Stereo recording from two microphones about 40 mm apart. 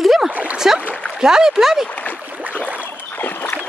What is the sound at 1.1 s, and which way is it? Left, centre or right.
Speech, centre.